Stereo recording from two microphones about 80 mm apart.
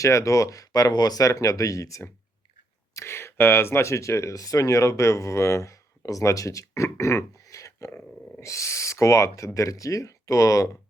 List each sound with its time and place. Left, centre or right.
0.0 s speech: left